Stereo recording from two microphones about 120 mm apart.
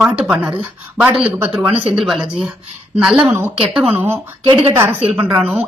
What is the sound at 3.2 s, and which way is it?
Speech, 20° right (ahead or behind).